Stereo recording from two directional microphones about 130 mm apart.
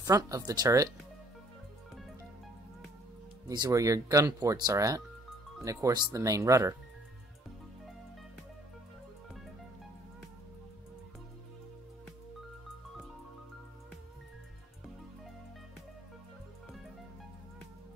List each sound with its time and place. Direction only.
0.0 s speech: 25° right (ahead or behind)
3.4 s speech: 25° right (ahead or behind)